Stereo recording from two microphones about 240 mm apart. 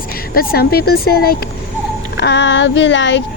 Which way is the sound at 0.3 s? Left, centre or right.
Left.